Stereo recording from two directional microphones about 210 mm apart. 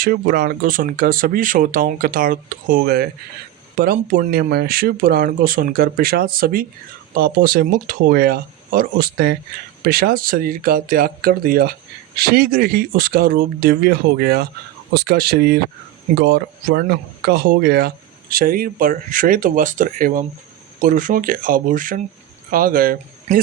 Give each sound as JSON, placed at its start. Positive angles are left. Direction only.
{"t": 0.0, "sound": "speech", "side_deg": -45}